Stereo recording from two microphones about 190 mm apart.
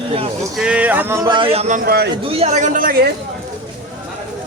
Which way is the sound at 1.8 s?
55° right (ahead or behind).